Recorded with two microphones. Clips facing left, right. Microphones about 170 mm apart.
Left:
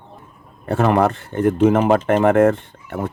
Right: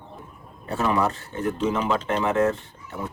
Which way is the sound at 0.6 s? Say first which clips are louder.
Left 7 dB; 60° left (ahead or behind).